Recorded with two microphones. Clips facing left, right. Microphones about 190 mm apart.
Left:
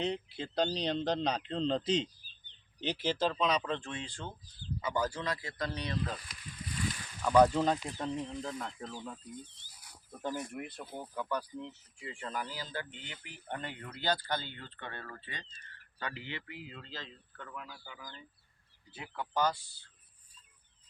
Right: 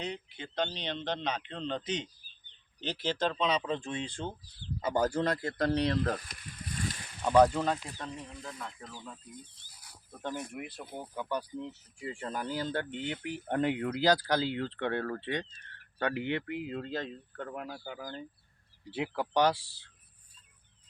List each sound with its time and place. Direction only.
0.0 s speech: 30° left (ahead or behind)
2.8 s speech: 10° left (ahead or behind)
3.6 s speech: 10° right (ahead or behind)
4.8 s speech: 45° right (ahead or behind)
7.2 s speech: 20° right (ahead or behind)
7.6 s speech: 20° left (ahead or behind)
10.1 s speech: 5° left (ahead or behind)
11.0 s speech: 15° right (ahead or behind)
11.9 s speech: 40° right (ahead or behind)
18.9 s speech: 75° right (ahead or behind)